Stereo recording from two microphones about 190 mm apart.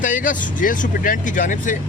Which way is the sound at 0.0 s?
45° left (ahead or behind).